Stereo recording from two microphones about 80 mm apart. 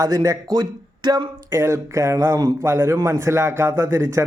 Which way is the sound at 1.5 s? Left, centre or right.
Right.